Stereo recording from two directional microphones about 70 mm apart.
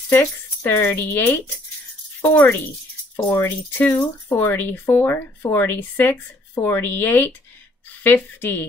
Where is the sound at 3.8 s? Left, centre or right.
Centre.